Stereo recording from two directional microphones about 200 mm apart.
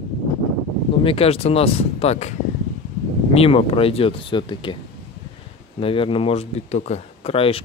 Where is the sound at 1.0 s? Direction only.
30° left (ahead or behind).